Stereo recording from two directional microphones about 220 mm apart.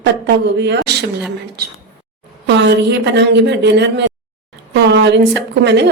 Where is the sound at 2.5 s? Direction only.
50° right (ahead or behind).